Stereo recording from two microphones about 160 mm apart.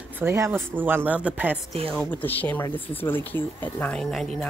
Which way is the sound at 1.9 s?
5° left (ahead or behind).